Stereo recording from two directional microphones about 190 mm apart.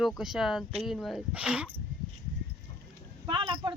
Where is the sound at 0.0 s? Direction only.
Centre (ahead or behind).